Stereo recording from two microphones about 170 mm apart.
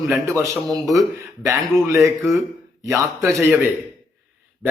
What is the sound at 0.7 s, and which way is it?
Speech, centre (ahead or behind).